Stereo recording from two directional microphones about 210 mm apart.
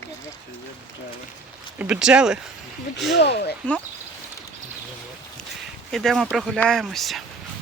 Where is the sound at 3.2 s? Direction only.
55° left (ahead or behind).